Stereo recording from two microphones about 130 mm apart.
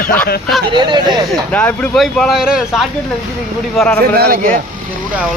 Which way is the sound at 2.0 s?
Centre (ahead or behind).